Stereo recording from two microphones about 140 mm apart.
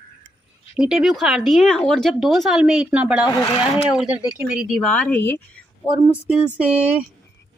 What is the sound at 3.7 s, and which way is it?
Speech, 5° right (ahead or behind).